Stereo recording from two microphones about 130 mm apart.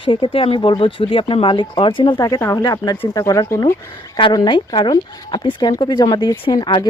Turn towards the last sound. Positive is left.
turn(degrees=35)  # may be behind; listen again after turning